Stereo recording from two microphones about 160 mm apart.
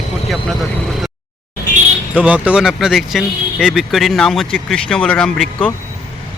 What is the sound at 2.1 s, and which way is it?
Speech, 10° right (ahead or behind).